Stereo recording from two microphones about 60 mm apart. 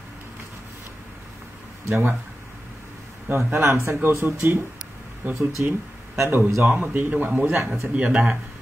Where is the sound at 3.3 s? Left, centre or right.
Right.